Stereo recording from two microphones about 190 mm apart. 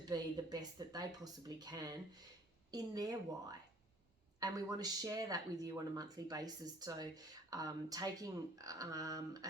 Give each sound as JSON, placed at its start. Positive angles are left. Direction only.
{"t": 0.1, "sound": "speech", "side_deg": -20}